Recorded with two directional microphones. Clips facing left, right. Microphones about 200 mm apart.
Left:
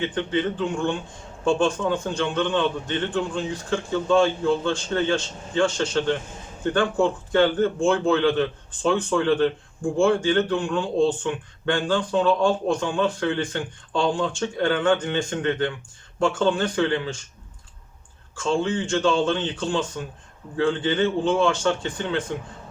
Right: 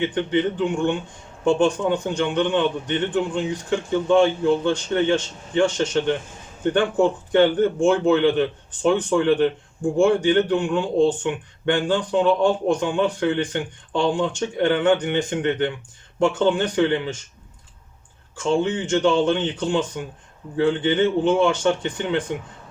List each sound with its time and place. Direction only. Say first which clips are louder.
0.0 s a man's voice: right 3 dB; 20° right (ahead or behind)
18.3 s a man's voice: right 2 dB; 20° right (ahead or behind)